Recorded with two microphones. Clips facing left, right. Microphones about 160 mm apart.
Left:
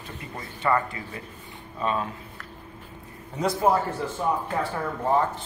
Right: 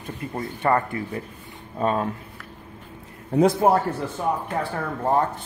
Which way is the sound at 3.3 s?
55° right (ahead or behind).